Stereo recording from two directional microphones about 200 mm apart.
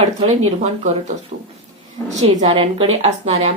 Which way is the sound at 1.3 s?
40° right (ahead or behind).